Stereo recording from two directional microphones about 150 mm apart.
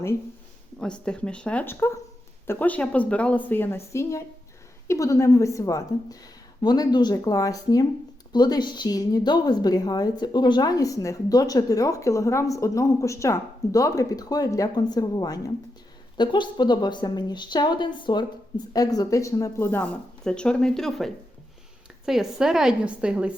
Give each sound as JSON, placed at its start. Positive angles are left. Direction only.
{"t": 0.8, "sound": "a woman's voice", "side_deg": 5}